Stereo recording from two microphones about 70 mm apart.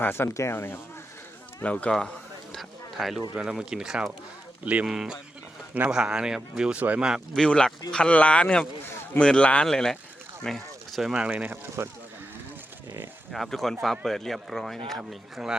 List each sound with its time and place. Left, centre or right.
0.0 s speech: left
1.6 s speech: centre
2.6 s speech: centre
4.6 s speech: centre
4.9 s speech: centre
6.7 s speech: right
7.3 s speech: centre
10.4 s a sound: centre
11.3 s speech: right
13.3 s speech: centre